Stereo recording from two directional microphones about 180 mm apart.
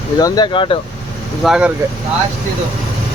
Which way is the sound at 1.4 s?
5° right (ahead or behind).